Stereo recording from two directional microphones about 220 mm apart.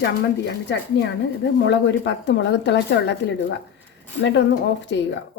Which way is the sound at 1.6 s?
50° left (ahead or behind).